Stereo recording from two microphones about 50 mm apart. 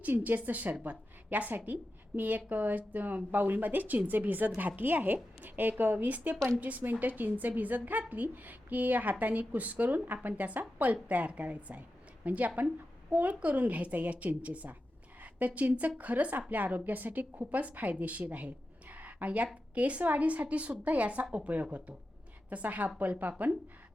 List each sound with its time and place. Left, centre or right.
0.0 s a woman's voice: right
6.3 s speech: centre
6.6 s a woman's voice: right